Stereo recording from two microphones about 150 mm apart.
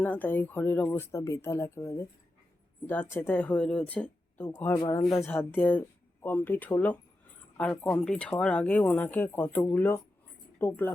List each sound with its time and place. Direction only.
0.0 s speech: 10° left (ahead or behind)
4.8 s speech: 25° left (ahead or behind)
5.3 s speech: 10° left (ahead or behind)